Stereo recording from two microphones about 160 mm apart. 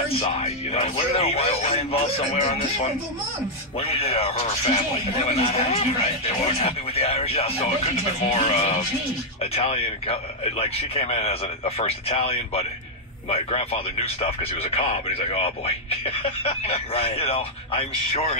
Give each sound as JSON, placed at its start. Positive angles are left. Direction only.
{"t": 0.2, "sound": "speech", "side_deg": 40}